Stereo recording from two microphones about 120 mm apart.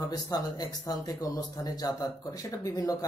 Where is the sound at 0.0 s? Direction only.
30° left (ahead or behind).